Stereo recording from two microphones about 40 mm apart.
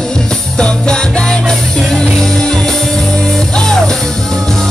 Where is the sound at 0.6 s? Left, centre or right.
Left.